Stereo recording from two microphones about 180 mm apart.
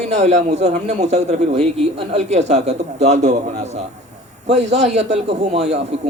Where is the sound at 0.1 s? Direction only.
40° right (ahead or behind).